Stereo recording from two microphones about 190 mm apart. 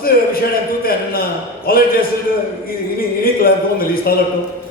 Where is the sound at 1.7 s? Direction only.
50° left (ahead or behind).